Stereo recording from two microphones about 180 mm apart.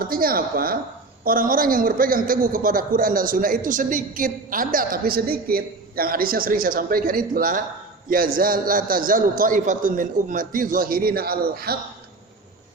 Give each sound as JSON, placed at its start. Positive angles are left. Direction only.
{"t": 0.0, "sound": "a man's voice", "side_deg": -55}